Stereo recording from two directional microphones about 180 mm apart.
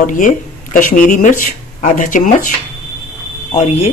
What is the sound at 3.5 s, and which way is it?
Speech, 35° left (ahead or behind).